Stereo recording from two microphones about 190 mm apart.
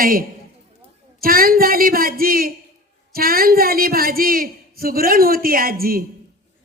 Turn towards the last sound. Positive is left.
turn(degrees=-50)  # may be behind; listen again after turning